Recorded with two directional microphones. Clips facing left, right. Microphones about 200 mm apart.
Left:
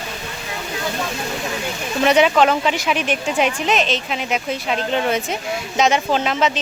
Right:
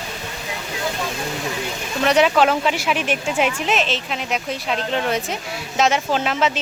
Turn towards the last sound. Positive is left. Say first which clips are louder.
# left 1 dB
turn(degrees=-5)  # may be behind; listen again after turning